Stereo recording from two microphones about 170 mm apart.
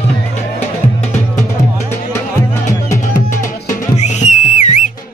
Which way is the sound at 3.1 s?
50° left (ahead or behind).